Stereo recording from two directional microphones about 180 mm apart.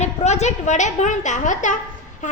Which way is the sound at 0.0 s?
40° left (ahead or behind).